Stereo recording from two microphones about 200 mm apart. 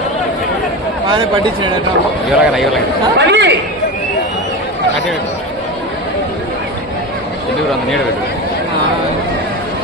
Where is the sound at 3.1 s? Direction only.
60° right (ahead or behind).